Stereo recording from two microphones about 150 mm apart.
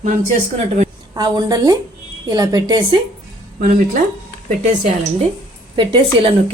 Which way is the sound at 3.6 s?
65° right (ahead or behind).